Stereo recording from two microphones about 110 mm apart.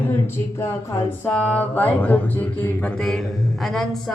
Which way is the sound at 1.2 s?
10° left (ahead or behind).